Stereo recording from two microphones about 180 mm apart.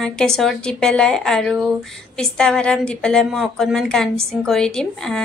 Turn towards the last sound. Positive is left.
turn(degrees=5)  # may be behind; listen again after turning